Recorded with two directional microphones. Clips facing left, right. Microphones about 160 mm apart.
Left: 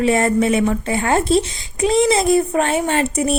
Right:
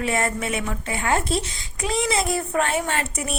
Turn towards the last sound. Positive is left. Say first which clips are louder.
# left 9 dB
turn(degrees=25)  # may be behind; listen again after turning